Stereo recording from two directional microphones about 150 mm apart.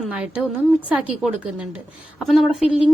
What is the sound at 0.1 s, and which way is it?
A woman's voice, 10° right (ahead or behind).